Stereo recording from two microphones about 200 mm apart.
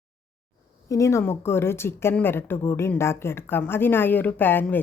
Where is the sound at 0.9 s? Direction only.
15° left (ahead or behind).